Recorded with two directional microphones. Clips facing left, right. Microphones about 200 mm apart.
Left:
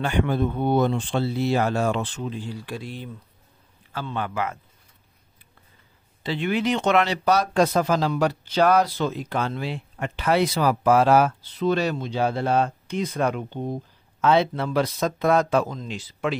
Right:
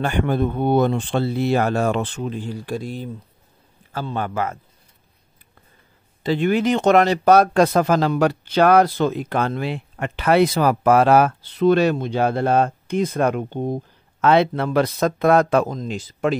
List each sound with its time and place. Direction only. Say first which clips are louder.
0.0 s a man's voice: right 2 dB; 50° right (ahead or behind)
6.2 s speech: right 5 dB; 45° right (ahead or behind)
14.2 s speech: right 3 dB; 65° right (ahead or behind); by 16.3 s 45° right (ahead or behind)